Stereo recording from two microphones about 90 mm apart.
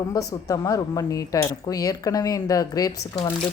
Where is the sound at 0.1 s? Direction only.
40° left (ahead or behind).